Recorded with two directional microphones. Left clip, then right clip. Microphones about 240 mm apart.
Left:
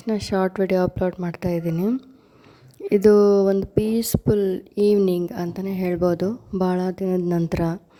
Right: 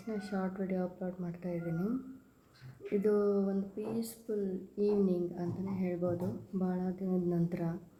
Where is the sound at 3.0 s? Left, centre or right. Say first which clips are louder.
Left 16 dB; left.